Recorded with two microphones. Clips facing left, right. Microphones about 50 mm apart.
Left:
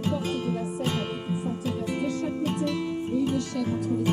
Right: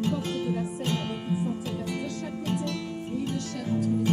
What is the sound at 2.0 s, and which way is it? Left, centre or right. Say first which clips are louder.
Music: left 5 dB; centre.